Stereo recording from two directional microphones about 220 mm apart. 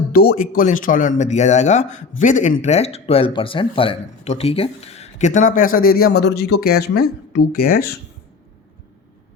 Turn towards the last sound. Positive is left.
turn(degrees=45)  # may be behind; listen again after turning